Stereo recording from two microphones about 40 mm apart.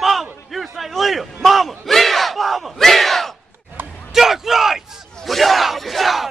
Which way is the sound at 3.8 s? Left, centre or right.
Right.